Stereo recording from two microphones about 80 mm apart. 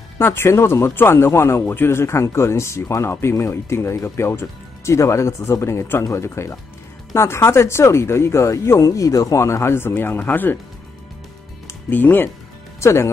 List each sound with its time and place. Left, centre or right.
0.2 s speech: left
11.9 s speech: left
12.8 s speech: left